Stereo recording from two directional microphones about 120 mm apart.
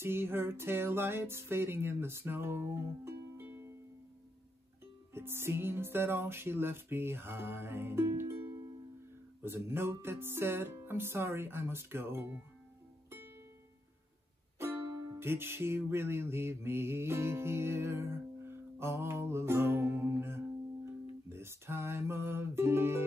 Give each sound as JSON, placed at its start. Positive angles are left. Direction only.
{"t": 0.0, "sound": "music", "side_deg": -20}
{"t": 5.1, "sound": "music", "side_deg": -20}
{"t": 14.6, "sound": "music", "side_deg": -20}